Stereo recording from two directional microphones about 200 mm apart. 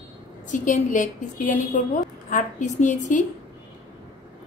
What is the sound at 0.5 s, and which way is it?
A woman's voice, 40° left (ahead or behind).